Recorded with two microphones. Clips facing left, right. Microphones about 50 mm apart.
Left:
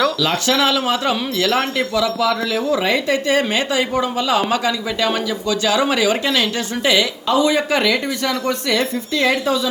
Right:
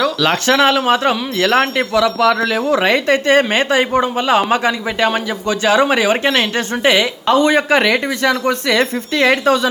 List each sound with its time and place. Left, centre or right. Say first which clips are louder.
0.2 s speech: right 4 dB; right